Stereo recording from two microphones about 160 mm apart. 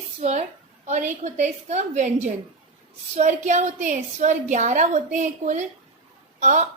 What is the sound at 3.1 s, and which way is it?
A woman's voice, 50° right (ahead or behind).